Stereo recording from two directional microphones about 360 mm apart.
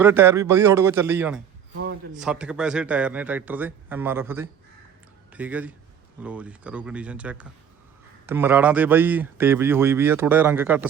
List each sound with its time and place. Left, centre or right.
0.0 s speech: centre
1.7 s a sound: right
2.1 s a man's voice: centre